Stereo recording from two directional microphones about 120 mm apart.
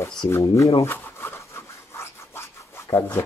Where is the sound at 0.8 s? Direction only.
20° left (ahead or behind).